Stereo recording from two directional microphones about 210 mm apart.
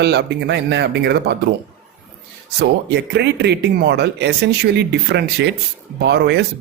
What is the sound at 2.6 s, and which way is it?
Speech, 50° right (ahead or behind).